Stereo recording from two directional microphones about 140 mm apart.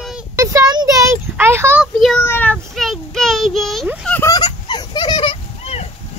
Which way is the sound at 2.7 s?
Centre (ahead or behind).